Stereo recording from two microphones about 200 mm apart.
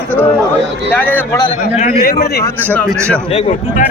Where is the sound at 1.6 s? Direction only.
40° left (ahead or behind).